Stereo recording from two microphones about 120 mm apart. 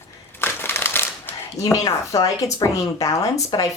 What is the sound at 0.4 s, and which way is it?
Shuffling cards, 20° left (ahead or behind).